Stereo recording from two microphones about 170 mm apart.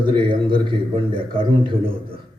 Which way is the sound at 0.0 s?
30° right (ahead or behind).